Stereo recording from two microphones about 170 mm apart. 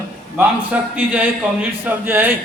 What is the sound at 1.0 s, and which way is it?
A man's voice, 10° right (ahead or behind).